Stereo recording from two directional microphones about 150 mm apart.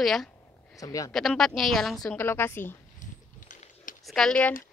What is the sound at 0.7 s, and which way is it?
Speech, 20° left (ahead or behind).